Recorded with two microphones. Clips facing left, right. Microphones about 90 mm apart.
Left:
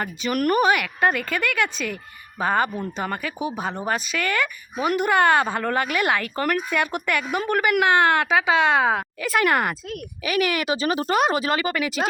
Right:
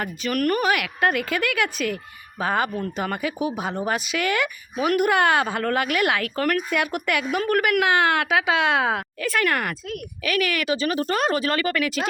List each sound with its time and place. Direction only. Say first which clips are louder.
0.0 s a woman's voice: left 1 dB; centre (ahead or behind)
0.3 s speech: left 2 dB; 15° left (ahead or behind)
0.6 s a woman's voice: left 2 dB; centre (ahead or behind)
9.2 s speech: left 3 dB; 15° left (ahead or behind)